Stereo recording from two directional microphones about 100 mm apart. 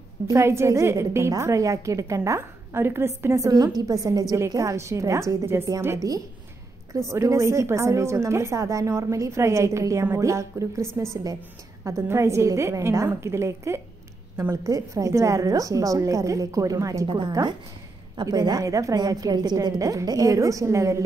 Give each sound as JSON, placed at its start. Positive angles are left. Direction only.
{"t": 0.3, "sound": "a woman's voice", "side_deg": -25}